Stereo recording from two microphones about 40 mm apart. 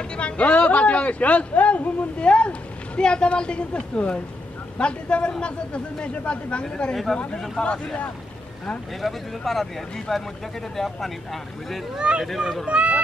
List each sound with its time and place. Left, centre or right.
0.1 s a woman's voice: left
9.0 s speech: centre
12.0 s speech: right